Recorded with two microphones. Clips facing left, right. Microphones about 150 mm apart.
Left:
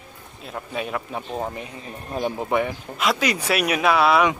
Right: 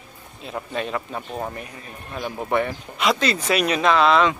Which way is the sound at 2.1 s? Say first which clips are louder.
Left 5 dB; 35° left (ahead or behind).